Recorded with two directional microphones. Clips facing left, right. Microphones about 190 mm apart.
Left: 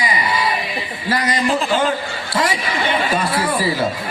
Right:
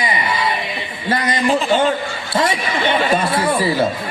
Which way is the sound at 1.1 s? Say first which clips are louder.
Right 1 dB; 25° right (ahead or behind).